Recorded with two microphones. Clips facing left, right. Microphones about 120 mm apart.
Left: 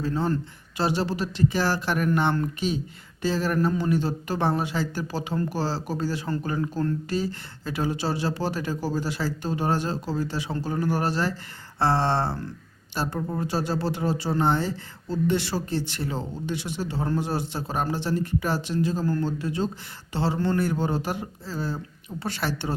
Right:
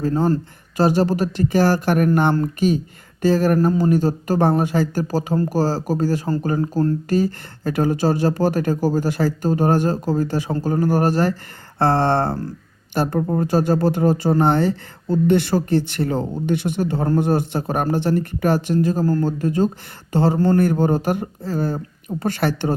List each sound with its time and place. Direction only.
0.0 s speech: 40° right (ahead or behind)